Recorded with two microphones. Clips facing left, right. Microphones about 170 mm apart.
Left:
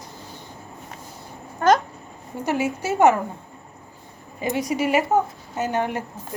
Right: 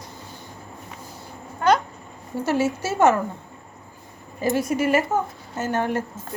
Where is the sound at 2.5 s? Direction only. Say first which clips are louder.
Right 1 dB; 15° left (ahead or behind).